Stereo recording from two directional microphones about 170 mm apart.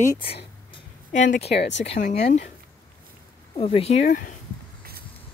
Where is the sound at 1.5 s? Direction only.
90° left.